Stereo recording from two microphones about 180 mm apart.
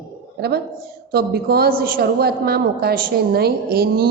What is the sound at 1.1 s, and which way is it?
A woman's voice, 60° right (ahead or behind).